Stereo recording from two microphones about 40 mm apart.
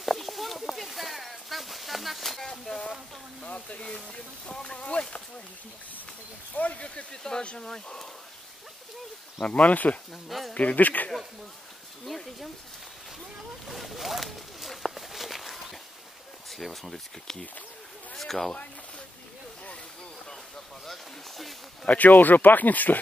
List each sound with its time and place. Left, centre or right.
0.0 s a sound: centre
3.4 s speech: left
6.5 s speech: left
7.1 s speech: centre
9.4 s speech: left
10.2 s speech: centre
10.5 s speech: left
12.1 s speech: centre
13.7 s walk: centre
16.4 s speech: centre
18.1 s speech: centre
20.8 s speech: centre
21.8 s speech: left